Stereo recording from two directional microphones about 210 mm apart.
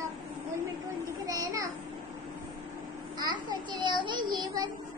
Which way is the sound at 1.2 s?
15° right (ahead or behind).